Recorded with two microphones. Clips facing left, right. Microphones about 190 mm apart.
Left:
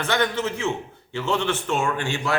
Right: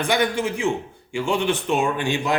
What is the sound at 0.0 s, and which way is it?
A man's voice, 10° right (ahead or behind).